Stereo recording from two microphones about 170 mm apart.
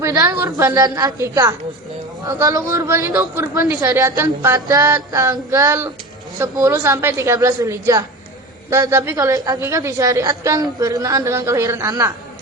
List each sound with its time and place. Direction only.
0.0 s a woman's voice: 20° right (ahead or behind)